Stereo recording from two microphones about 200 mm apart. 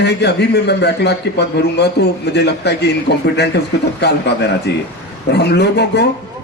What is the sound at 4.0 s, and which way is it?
A man's voice, 55° left (ahead or behind).